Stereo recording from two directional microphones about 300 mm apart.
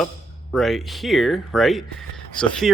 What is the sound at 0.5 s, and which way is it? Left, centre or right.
Speech, centre.